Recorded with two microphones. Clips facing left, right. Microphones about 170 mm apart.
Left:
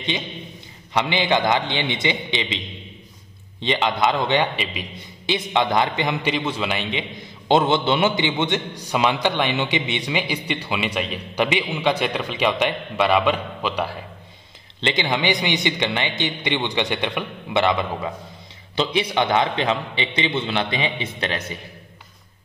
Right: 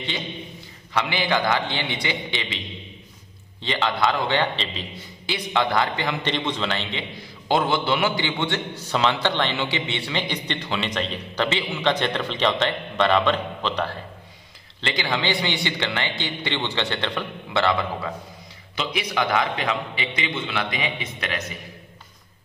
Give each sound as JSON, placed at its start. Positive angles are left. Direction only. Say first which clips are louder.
{"t": 0.9, "sound": "a man's voice", "louder": "left 3 dB", "side_deg": 20}
{"t": 3.6, "sound": "a man's voice", "louder": "left 2 dB", "side_deg": 20}
{"t": 6.2, "sound": "a man's voice", "louder": "left 2 dB", "side_deg": 5}
{"t": 14.8, "sound": "a man's voice", "louder": "left 3 dB", "side_deg": 20}